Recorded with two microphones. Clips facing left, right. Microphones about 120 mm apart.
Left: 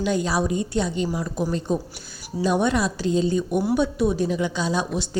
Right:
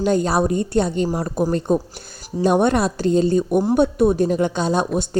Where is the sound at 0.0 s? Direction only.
45° right (ahead or behind).